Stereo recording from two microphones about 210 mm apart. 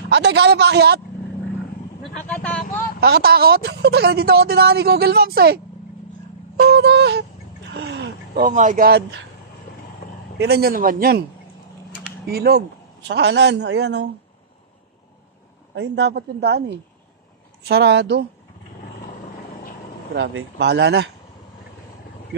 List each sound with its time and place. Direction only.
0.1 s a woman's voice: 55° right (ahead or behind)
2.2 s speech: 5° left (ahead or behind)
3.0 s a woman's voice: 50° right (ahead or behind)
6.5 s a sound: 50° right (ahead or behind)
8.5 s speech: 35° right (ahead or behind)
10.0 s vehicle: 45° left (ahead or behind)
10.4 s a woman's voice: 50° right (ahead or behind)
12.3 s a woman's voice: 50° right (ahead or behind)
15.7 s a woman's voice: 55° right (ahead or behind)
20.2 s a woman's voice: 55° right (ahead or behind)